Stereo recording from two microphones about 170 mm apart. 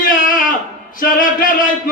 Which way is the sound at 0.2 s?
55° left (ahead or behind).